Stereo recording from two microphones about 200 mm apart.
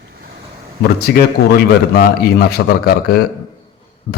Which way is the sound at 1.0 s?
50° left (ahead or behind).